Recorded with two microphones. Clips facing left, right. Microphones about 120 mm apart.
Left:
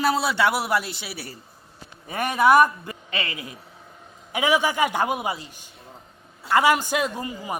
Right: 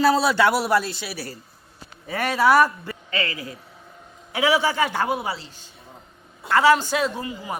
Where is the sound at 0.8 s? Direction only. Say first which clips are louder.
Right 4 dB; 20° left (ahead or behind).